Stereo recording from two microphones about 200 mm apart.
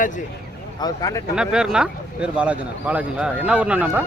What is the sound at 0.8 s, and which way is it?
Speech, 15° left (ahead or behind).